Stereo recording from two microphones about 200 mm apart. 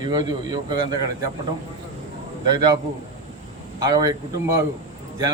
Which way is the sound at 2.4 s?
20° right (ahead or behind).